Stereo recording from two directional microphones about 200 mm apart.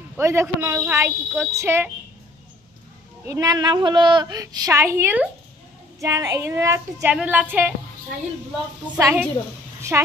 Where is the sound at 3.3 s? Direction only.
20° right (ahead or behind).